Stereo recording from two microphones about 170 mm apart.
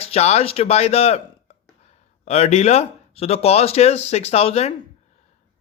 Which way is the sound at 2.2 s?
40° left (ahead or behind).